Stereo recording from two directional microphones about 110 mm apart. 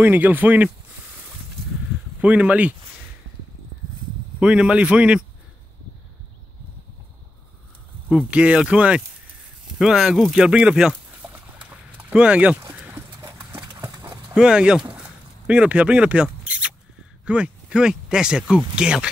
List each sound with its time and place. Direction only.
0.0 s a man's voice: 15° right (ahead or behind)
2.2 s a man's voice: 10° right (ahead or behind)
4.4 s a man's voice: 10° right (ahead or behind)
8.3 s a man's voice: 10° right (ahead or behind)
12.7 s horse: 20° right (ahead or behind)
14.3 s a sound: 5° right (ahead or behind)
17.2 s speech: 10° right (ahead or behind)